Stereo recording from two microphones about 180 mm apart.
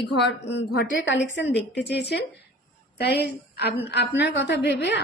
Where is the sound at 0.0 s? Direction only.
70° left (ahead or behind); by 1.6 s 90° left.